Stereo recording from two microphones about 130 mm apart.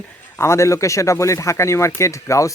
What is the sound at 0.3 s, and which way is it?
A man's voice, 20° left (ahead or behind).